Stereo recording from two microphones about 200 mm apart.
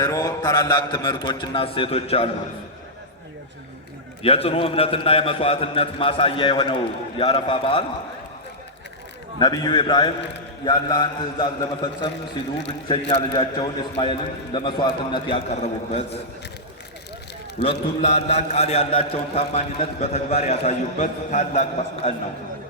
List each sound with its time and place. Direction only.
0.0 s a man's voice: 15° left (ahead or behind)
4.2 s a man's voice: 30° left (ahead or behind)
9.4 s a man's voice: 20° left (ahead or behind)
17.7 s a man's voice: 35° left (ahead or behind)